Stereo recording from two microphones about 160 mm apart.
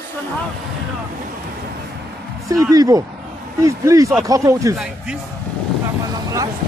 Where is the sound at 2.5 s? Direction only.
20° right (ahead or behind).